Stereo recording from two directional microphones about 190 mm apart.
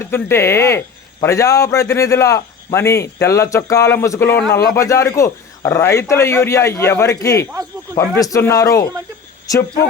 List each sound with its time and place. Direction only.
0.0 s a man's voice: 15° left (ahead or behind)